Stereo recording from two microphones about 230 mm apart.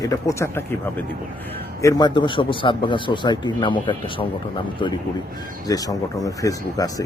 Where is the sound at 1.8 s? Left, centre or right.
Centre.